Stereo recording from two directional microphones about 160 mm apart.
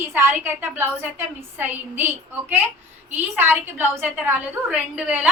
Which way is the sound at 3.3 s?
10° right (ahead or behind).